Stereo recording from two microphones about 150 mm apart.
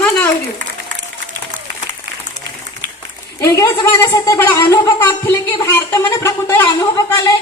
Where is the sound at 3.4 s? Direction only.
20° left (ahead or behind).